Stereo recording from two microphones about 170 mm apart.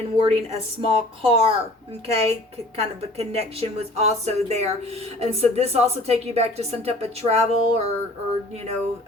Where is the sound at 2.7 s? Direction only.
35° right (ahead or behind).